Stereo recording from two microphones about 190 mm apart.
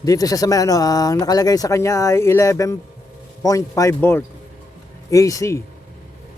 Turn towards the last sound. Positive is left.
turn(degrees=15)  # may be behind; listen again after turning